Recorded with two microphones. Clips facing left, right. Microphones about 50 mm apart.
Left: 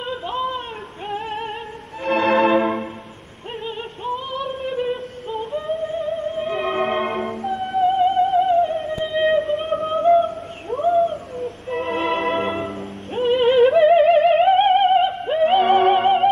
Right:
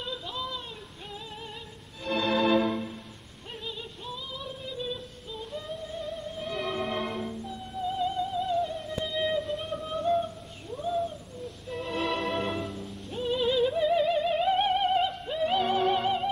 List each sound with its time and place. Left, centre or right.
0.0 s a sound: left
1.1 s music: left
5.5 s music: left
10.7 s music: left